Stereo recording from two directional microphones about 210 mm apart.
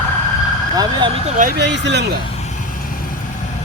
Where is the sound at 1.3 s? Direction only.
45° right (ahead or behind).